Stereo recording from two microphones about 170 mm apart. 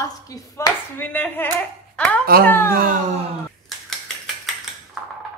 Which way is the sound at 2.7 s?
60° right (ahead or behind).